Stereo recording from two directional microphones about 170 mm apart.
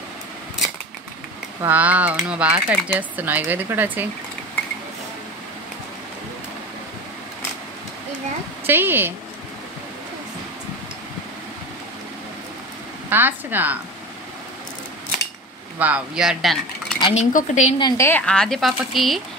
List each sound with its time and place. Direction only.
1.6 s speech: 10° right (ahead or behind)
8.6 s speech: 10° right (ahead or behind)
13.1 s speech: 10° right (ahead or behind)
15.8 s speech: 5° right (ahead or behind)
17.1 s speech: 45° left (ahead or behind)
17.7 s a woman's voice: 20° left (ahead or behind); by 19.2 s centre (ahead or behind)